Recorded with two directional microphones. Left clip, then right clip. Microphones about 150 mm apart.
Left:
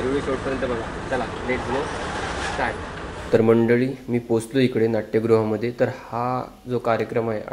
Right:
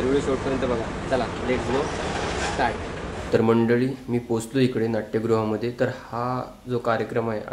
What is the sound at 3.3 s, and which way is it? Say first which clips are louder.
Speech: left 3 dB; 15° left (ahead or behind).